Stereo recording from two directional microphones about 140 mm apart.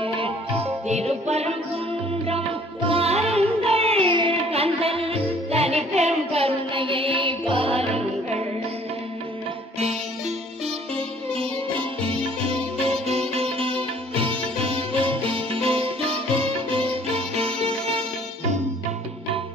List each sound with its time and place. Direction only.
0.0 s music: 40° right (ahead or behind)
2.9 s music: 45° right (ahead or behind)
12.0 s music: 45° right (ahead or behind)